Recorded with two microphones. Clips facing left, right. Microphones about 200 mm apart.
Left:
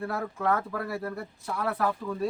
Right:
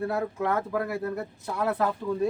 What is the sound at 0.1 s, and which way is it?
Speech, 20° right (ahead or behind).